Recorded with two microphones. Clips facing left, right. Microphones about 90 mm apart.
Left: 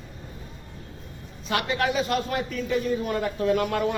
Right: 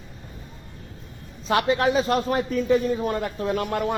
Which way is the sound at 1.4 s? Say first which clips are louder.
Right 5 dB; 30° right (ahead or behind).